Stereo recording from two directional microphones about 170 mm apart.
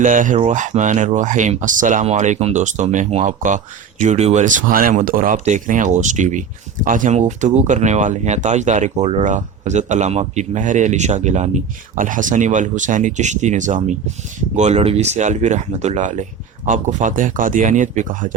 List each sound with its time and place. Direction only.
0.0 s speech: 50° right (ahead or behind)